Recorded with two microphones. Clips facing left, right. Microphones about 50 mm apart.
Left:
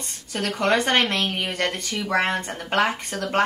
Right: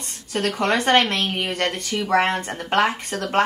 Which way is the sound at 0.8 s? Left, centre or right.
Centre.